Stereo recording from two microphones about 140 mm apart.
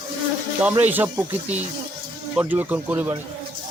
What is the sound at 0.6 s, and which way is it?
Speech, 15° right (ahead or behind).